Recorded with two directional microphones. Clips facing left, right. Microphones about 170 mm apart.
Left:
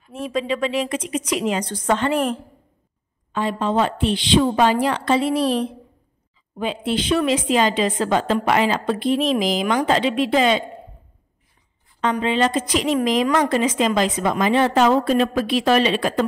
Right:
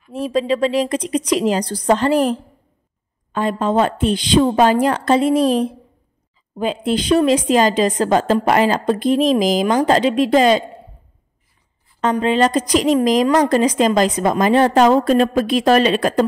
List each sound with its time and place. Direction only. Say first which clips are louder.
0.1 s a woman's voice: right 5 dB; 35° right (ahead or behind)
3.3 s a woman's voice: right 3 dB; 45° right (ahead or behind)
12.0 s a woman's voice: right 4 dB; 40° right (ahead or behind)